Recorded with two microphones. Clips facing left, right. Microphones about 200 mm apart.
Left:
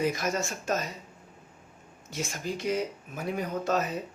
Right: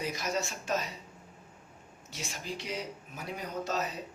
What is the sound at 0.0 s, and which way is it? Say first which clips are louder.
Speech: left 5 dB; 50° left (ahead or behind).